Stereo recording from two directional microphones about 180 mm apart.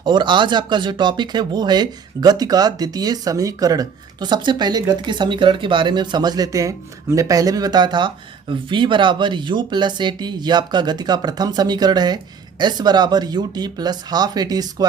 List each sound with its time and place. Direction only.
0.0 s speech: 25° right (ahead or behind)